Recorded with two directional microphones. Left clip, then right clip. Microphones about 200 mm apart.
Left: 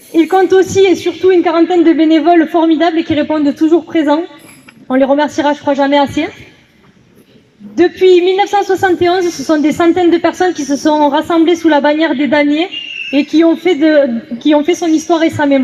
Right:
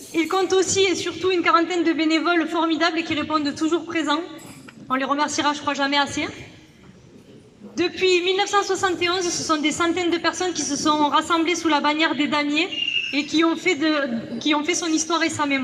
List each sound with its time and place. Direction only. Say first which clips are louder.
0.1 s a woman's voice: left 11 dB; 45° left (ahead or behind)
7.8 s a woman's voice: left 12 dB; 45° left (ahead or behind)